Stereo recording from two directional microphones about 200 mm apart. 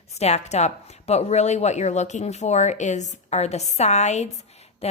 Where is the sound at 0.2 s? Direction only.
35° left (ahead or behind).